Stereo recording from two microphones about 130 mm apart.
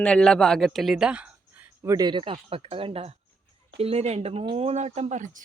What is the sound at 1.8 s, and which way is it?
Speech, 25° right (ahead or behind).